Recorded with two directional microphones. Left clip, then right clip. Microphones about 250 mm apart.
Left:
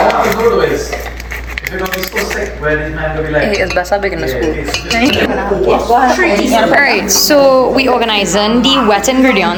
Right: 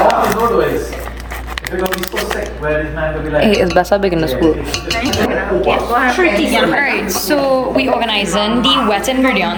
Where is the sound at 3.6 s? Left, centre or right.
Right.